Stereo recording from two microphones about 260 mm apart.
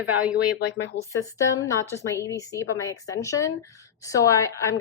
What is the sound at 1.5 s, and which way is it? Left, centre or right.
Speech, centre.